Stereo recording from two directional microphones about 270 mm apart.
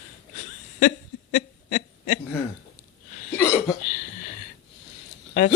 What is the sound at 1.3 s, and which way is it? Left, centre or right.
Owl, left.